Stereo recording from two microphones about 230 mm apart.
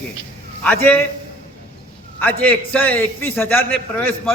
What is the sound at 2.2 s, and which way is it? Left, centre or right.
A man's voice, centre.